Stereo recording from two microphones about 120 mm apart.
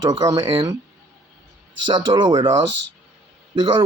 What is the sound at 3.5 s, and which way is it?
Speech, 40° right (ahead or behind).